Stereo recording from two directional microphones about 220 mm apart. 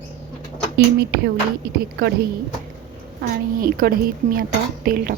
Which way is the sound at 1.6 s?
45° right (ahead or behind).